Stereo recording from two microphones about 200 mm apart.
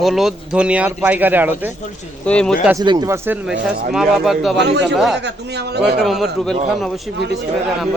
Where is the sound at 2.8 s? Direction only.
20° right (ahead or behind); by 4.5 s centre (ahead or behind).